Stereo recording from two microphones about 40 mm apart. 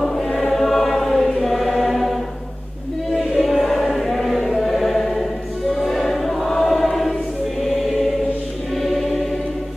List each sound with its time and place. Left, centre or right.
0.0 s choir: centre
3.2 s choir: centre
4.6 s music: centre
5.9 s choir: centre